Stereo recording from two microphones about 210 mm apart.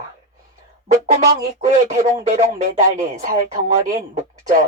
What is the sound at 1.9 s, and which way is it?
Speech, 35° right (ahead or behind).